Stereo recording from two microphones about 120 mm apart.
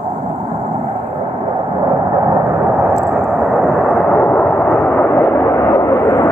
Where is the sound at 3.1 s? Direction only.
Centre (ahead or behind).